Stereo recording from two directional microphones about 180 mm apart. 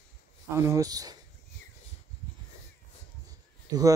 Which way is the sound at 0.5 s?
15° right (ahead or behind).